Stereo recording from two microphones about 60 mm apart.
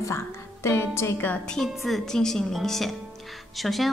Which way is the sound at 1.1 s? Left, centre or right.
Left.